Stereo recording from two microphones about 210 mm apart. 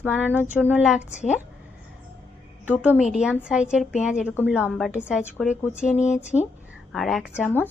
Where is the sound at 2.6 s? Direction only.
5° right (ahead or behind).